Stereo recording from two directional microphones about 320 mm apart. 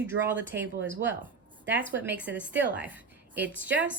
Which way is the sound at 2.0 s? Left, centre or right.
Centre.